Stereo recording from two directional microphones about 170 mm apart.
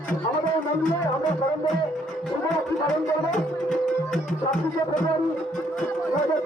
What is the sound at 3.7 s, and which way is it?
Music, 5° left (ahead or behind).